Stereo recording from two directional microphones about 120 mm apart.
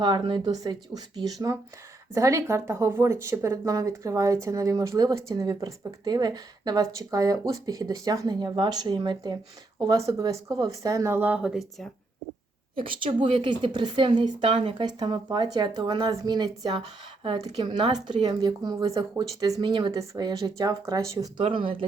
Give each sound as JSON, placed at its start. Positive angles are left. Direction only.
{"t": 0.0, "sound": "speech", "side_deg": -40}
{"t": 12.8, "sound": "speech", "side_deg": -45}
{"t": 21.3, "sound": "speech", "side_deg": -45}